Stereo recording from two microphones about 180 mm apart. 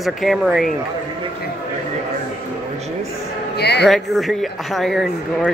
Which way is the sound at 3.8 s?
Centre (ahead or behind).